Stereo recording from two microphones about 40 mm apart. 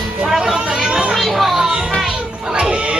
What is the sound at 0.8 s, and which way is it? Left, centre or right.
Children playing, centre.